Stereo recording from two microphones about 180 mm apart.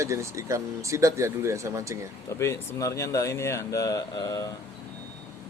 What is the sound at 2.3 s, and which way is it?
Speech, 15° left (ahead or behind).